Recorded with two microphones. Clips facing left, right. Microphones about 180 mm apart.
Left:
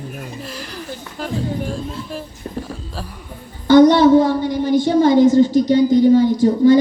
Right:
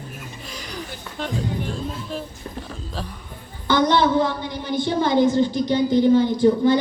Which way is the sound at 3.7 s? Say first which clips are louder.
Left 9 dB; 45° left (ahead or behind).